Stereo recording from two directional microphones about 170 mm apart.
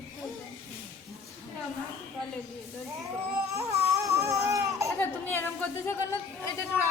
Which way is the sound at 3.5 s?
15° right (ahead or behind).